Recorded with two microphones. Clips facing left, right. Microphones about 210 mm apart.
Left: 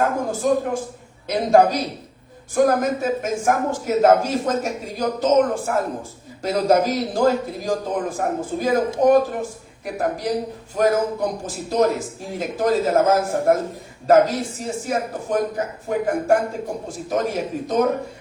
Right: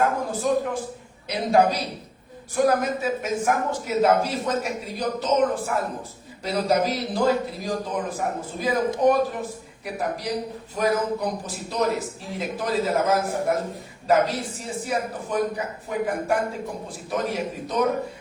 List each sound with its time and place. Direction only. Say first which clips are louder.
0.0 s speech: left 3 dB; 45° left (ahead or behind)